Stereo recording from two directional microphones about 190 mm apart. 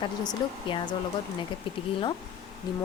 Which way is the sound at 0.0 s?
25° left (ahead or behind).